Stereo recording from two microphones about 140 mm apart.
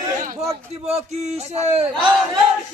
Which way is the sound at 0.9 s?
50° right (ahead or behind).